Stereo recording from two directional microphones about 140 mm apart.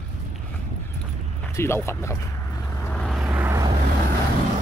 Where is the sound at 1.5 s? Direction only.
20° left (ahead or behind).